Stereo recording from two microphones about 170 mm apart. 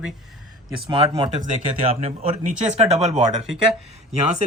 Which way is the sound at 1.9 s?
45° right (ahead or behind).